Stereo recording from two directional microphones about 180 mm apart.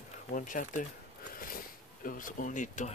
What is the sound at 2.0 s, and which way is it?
Speech, 50° left (ahead or behind).